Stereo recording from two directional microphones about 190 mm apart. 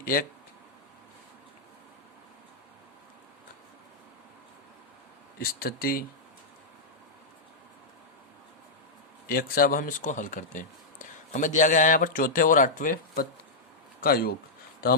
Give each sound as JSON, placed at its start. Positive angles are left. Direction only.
{"t": 0.0, "sound": "speech", "side_deg": 50}
{"t": 5.4, "sound": "speech", "side_deg": 50}
{"t": 9.2, "sound": "speech", "side_deg": 50}